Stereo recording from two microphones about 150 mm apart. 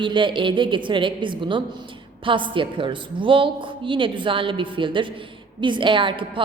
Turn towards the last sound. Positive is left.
turn(degrees=-35)  # may be behind; listen again after turning